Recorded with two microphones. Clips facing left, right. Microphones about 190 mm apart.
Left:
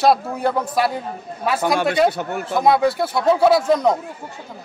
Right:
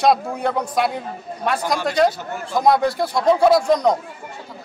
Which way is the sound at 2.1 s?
60° left (ahead or behind).